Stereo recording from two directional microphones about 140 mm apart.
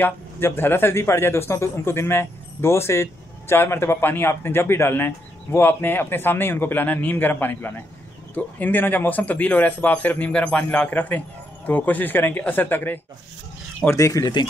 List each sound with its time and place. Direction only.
0.0 s speech: 15° left (ahead or behind)